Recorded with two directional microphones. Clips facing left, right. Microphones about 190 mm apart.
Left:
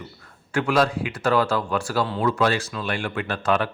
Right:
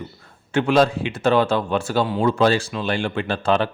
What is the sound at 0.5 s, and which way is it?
Speech, 25° right (ahead or behind).